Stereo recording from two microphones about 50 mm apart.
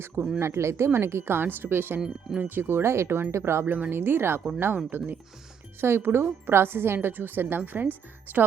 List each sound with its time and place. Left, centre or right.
0.3 s a woman's voice: right
2.0 s speech: centre
2.4 s a woman's voice: right
3.7 s a woman's voice: right
5.8 s a woman's voice: right